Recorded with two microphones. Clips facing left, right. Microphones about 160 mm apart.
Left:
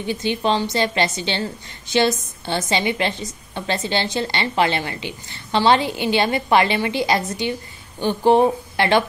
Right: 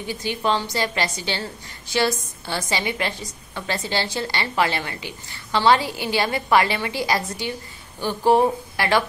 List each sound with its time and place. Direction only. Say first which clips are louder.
0.0 s a woman's voice: left 3 dB; 20° left (ahead or behind)